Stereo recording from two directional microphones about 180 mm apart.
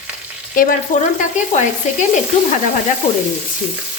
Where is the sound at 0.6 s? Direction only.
50° left (ahead or behind).